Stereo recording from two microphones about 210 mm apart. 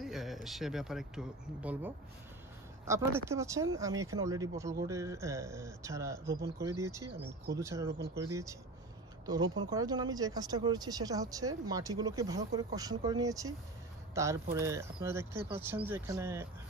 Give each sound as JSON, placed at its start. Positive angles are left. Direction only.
{"t": 0.0, "sound": "speech", "side_deg": 0}
{"t": 7.9, "sound": "speech", "side_deg": -50}
{"t": 8.2, "sound": "speech", "side_deg": -15}